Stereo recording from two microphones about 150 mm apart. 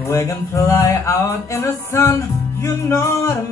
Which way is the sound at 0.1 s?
20° left (ahead or behind).